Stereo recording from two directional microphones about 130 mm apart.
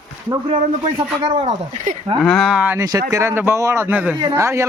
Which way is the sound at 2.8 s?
25° right (ahead or behind).